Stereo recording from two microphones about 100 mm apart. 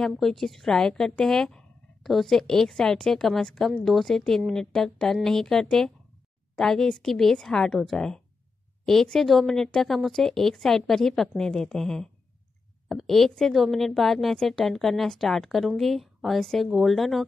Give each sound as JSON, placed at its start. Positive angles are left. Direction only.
{"t": 0.0, "sound": "a woman's voice", "side_deg": 5}